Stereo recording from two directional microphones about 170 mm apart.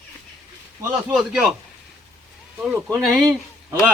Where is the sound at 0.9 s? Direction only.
5° right (ahead or behind).